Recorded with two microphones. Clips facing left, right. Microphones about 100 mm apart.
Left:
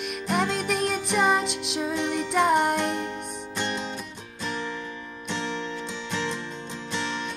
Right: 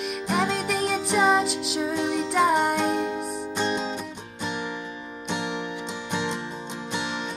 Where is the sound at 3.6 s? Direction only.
20° right (ahead or behind).